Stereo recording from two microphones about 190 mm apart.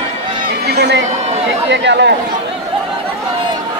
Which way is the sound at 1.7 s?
65° right (ahead or behind).